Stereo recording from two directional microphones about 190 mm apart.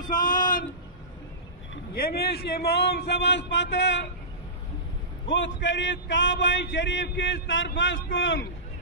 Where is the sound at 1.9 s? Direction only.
55° left (ahead or behind).